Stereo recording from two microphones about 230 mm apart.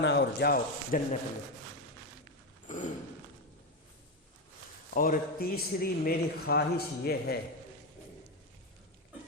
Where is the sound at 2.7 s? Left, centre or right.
Left.